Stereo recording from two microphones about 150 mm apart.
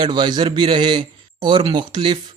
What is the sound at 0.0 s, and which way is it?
Speech, 30° right (ahead or behind).